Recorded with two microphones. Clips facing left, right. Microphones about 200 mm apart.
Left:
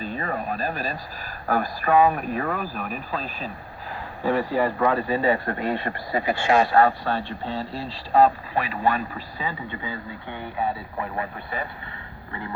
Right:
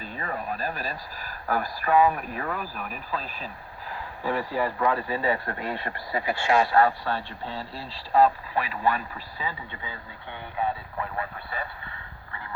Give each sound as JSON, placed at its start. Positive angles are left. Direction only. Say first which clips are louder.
{"t": 0.0, "sound": "a man's voice", "louder": "left 5 dB", "side_deg": 25}